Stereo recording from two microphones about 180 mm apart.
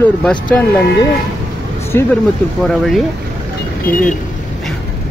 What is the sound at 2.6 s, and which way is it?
Speech, centre (ahead or behind).